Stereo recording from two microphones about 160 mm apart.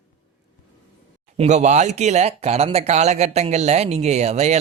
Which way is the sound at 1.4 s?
45° right (ahead or behind).